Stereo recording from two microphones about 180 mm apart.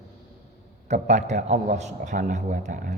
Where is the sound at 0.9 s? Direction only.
40° right (ahead or behind).